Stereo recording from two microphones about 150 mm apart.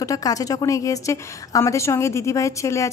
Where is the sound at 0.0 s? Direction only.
25° left (ahead or behind).